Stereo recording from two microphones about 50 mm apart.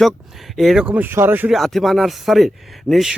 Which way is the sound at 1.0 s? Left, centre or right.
Right.